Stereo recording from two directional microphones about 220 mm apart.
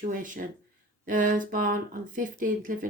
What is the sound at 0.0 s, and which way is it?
Speech, 35° right (ahead or behind).